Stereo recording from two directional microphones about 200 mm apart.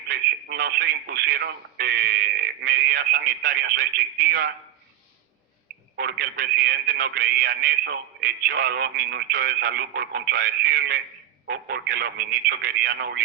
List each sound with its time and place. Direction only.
0.1 s speech: 50° right (ahead or behind)
6.0 s speech: 50° right (ahead or behind)